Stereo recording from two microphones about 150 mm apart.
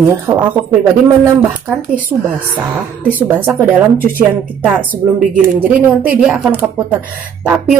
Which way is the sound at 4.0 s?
70° right (ahead or behind).